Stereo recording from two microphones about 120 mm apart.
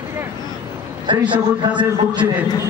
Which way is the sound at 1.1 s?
40° right (ahead or behind).